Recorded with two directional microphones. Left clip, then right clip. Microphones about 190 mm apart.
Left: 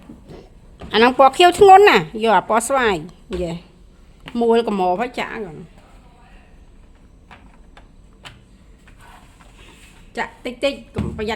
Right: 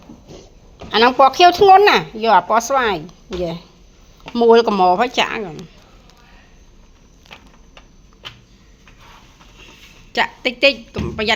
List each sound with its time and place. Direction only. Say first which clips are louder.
0.9 s speech: right 1 dB; 20° left (ahead or behind)
4.3 s speech: right 5 dB; centre (ahead or behind)
10.1 s a woman's voice: right 8 dB; 25° right (ahead or behind)
11.2 s music: right 8 dB; 25° right (ahead or behind)